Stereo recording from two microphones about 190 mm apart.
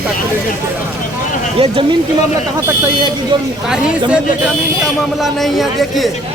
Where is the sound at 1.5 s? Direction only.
30° right (ahead or behind).